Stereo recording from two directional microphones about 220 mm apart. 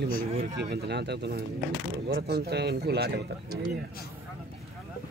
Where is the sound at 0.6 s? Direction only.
50° right (ahead or behind).